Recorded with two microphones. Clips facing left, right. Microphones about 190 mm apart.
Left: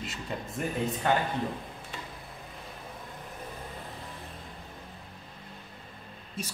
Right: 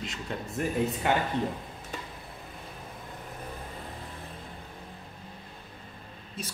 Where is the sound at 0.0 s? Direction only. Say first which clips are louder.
Right 1 dB; centre (ahead or behind).